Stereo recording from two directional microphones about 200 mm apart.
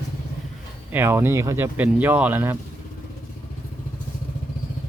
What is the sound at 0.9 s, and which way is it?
Speech, 10° right (ahead or behind).